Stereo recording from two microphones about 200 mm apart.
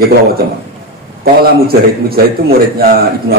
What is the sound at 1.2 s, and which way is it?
A man's voice, 50° right (ahead or behind).